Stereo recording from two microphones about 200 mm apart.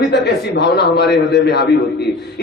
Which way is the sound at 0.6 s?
55° left (ahead or behind).